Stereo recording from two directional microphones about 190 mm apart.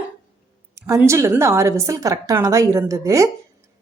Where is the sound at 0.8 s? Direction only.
15° right (ahead or behind).